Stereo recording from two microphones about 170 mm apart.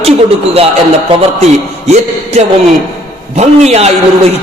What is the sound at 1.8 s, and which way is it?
A man's voice, 40° right (ahead or behind).